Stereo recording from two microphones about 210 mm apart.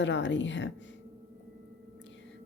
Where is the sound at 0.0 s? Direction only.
60° left (ahead or behind).